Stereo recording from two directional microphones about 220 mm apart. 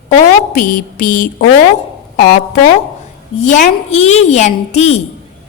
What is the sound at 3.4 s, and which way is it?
A woman's voice, 35° left (ahead or behind).